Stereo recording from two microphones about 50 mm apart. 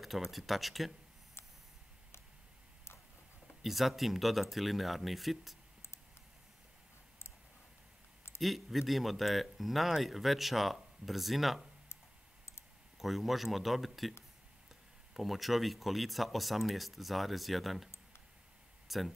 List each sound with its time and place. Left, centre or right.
0.0 s speech: centre
3.6 s speech: centre
8.4 s speech: centre
13.0 s speech: centre
15.1 s speech: centre
18.9 s speech: centre